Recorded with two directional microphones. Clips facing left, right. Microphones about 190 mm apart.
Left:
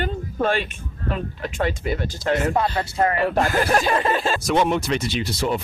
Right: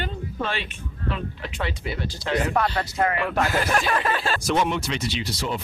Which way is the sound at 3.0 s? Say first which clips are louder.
Left 4 dB; 35° left (ahead or behind).